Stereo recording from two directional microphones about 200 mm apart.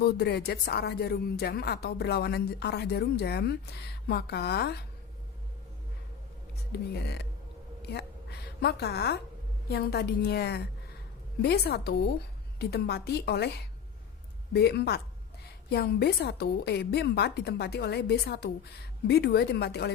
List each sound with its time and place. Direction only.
0.0 s speech: 55° left (ahead or behind)
6.9 s speech: 55° left (ahead or behind)
7.8 s a sound: 55° left (ahead or behind)
8.6 s speech: 55° left (ahead or behind)